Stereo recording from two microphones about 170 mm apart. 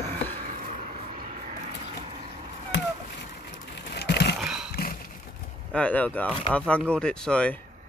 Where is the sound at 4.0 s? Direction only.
75° left (ahead or behind).